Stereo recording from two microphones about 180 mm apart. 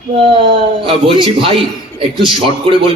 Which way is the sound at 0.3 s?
30° right (ahead or behind).